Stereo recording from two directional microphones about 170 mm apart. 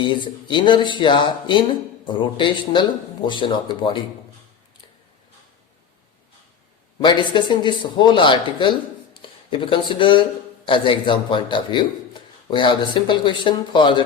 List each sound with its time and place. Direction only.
0.0 s speech: 30° left (ahead or behind)
7.0 s speech: 30° left (ahead or behind)